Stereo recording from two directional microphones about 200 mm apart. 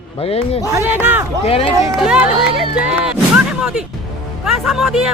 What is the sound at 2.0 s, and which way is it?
Speech, 5° right (ahead or behind).